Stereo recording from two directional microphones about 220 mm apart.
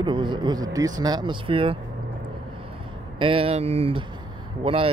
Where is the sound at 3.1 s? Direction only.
25° right (ahead or behind).